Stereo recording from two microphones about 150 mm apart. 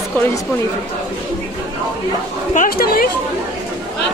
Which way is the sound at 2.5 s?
70° left (ahead or behind).